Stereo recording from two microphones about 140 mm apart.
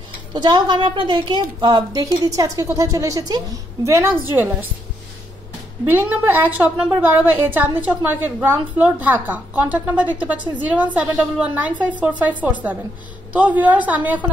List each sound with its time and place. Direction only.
0.3 s a woman's voice: 35° right (ahead or behind); by 4.6 s 15° right (ahead or behind)
5.9 s a woman's voice: 15° right (ahead or behind)